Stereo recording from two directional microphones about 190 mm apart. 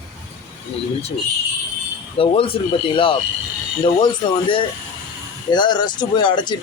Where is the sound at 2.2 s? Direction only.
30° left (ahead or behind).